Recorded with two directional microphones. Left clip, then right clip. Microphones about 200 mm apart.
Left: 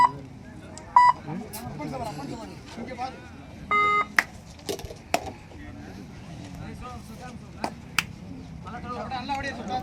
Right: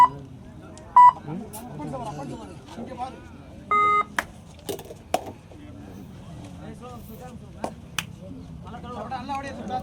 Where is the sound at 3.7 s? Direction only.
35° left (ahead or behind).